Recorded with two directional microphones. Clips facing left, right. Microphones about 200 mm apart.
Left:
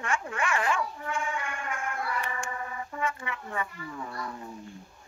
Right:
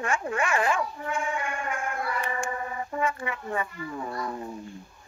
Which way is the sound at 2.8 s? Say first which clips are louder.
Right 5 dB; 30° right (ahead or behind).